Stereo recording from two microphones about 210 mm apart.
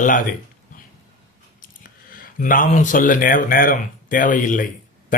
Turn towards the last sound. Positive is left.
turn(degrees=40)  # may be behind; listen again after turning